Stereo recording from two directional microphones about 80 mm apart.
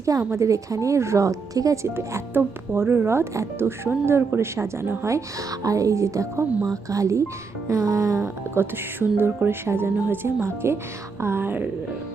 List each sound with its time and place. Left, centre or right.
0.3 s speech: right